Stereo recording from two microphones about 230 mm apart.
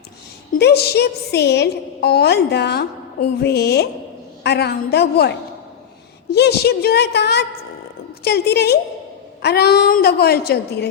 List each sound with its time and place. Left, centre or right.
0.6 s a woman's voice: left
6.3 s a woman's voice: left